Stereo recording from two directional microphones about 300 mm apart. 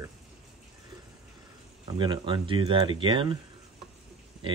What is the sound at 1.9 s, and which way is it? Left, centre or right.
Speech, centre.